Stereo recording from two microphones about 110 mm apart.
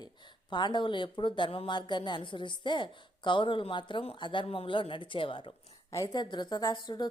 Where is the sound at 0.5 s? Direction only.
45° left (ahead or behind).